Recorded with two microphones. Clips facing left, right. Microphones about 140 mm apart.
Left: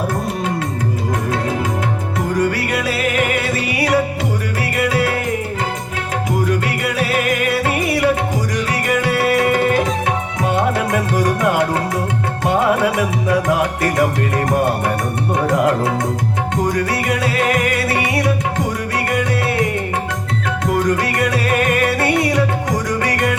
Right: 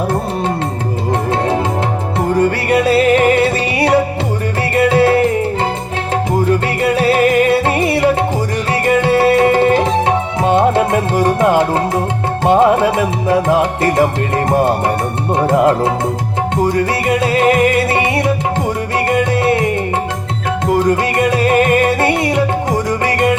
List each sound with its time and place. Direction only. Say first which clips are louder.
2.3 s music: right 6 dB; 30° right (ahead or behind)
6.4 s music: right 5 dB; 30° right (ahead or behind)